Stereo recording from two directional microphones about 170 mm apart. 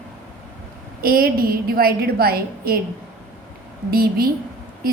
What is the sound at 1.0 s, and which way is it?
A woman's voice, 60° right (ahead or behind).